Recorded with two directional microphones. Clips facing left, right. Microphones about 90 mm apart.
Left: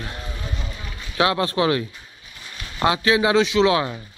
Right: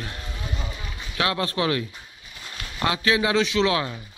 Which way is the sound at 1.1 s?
20° left (ahead or behind).